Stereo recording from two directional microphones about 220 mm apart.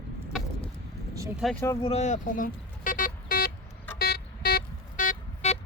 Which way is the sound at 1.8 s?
30° left (ahead or behind).